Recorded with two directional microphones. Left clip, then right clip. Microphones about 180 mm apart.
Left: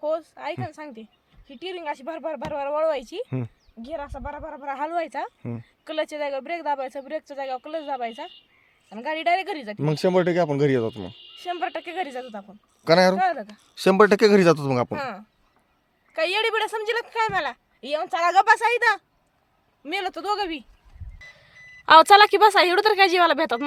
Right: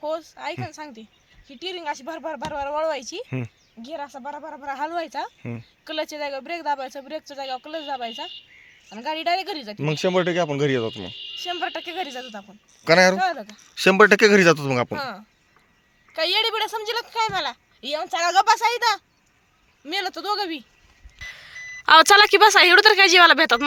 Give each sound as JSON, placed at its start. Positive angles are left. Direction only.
{"t": 0.0, "sound": "a sound", "side_deg": 20}
{"t": 0.6, "sound": "speech", "side_deg": 20}
{"t": 3.2, "sound": "a woman's voice", "side_deg": 5}
{"t": 5.4, "sound": "speech", "side_deg": 0}
{"t": 5.8, "sound": "a woman's voice", "side_deg": 15}
{"t": 12.8, "sound": "a woman's voice", "side_deg": 5}